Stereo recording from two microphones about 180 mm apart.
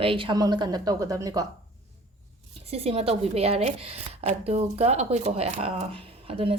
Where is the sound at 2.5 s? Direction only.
35° right (ahead or behind).